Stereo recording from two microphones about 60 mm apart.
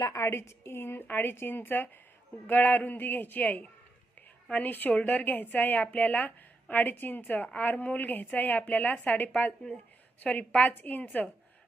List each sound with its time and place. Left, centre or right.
0.2 s a woman's voice: left
9.3 s a woman's voice: centre